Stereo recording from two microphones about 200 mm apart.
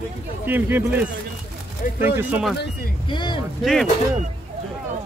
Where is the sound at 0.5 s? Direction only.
10° right (ahead or behind).